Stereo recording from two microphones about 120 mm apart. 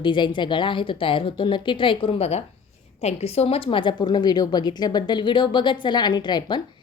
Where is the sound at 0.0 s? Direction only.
40° left (ahead or behind).